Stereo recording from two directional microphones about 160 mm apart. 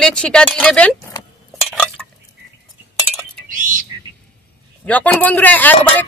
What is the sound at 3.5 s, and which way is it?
Bird, 55° right (ahead or behind).